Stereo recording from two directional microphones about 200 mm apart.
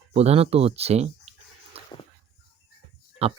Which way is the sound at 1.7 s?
30° right (ahead or behind).